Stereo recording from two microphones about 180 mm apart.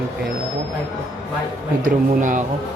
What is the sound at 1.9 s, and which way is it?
Speech, 45° right (ahead or behind).